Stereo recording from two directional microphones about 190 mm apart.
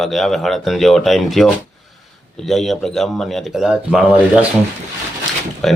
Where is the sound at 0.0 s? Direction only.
Centre (ahead or behind).